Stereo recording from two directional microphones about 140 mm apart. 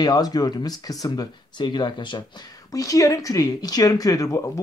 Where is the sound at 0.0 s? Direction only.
30° left (ahead or behind).